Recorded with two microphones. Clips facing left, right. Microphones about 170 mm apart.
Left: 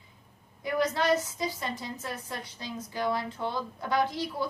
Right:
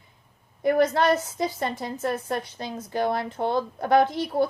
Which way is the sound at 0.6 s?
60° right (ahead or behind).